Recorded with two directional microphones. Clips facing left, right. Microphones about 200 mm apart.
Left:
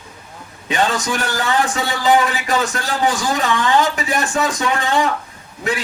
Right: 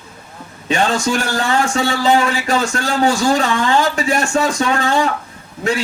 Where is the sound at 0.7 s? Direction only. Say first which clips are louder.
Right 3 dB; 30° right (ahead or behind).